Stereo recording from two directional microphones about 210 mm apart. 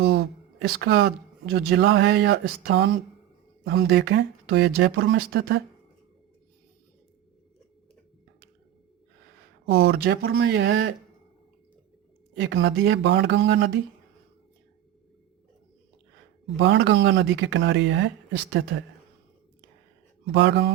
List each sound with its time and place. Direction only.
0.1 s speech: 50° right (ahead or behind)
9.6 s speech: 50° right (ahead or behind)
12.4 s speech: 60° right (ahead or behind)
16.6 s speech: 60° right (ahead or behind)
20.2 s speech: 55° right (ahead or behind)